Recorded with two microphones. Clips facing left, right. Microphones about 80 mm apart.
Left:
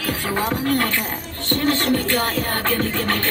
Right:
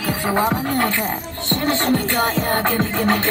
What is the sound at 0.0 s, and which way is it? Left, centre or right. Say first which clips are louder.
Music: right 4 dB; centre.